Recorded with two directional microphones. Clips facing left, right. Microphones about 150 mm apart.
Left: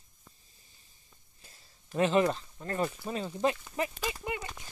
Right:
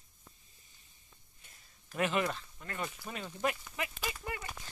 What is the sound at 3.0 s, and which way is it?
Speech, 30° left (ahead or behind).